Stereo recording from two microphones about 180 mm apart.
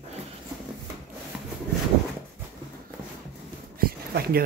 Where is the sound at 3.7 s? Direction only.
55° right (ahead or behind).